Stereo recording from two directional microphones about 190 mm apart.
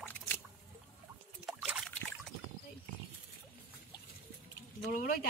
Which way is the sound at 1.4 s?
Centre (ahead or behind).